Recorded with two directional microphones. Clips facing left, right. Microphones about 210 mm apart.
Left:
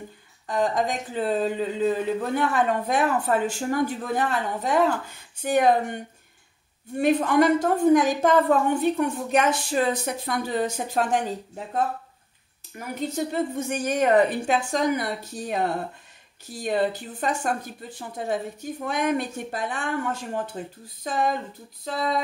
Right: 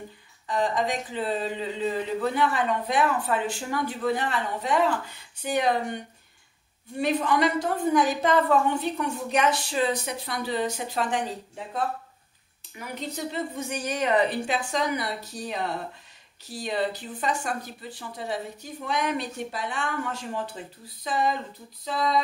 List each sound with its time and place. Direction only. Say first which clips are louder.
0.5 s a woman's voice: left 2 dB; 45° left (ahead or behind)
7.0 s a woman's voice: left 4 dB; 50° left (ahead or behind)
16.6 s a woman's voice: left 4 dB; 50° left (ahead or behind)